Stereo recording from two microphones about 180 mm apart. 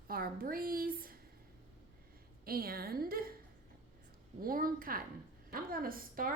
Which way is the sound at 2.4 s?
55° right (ahead or behind).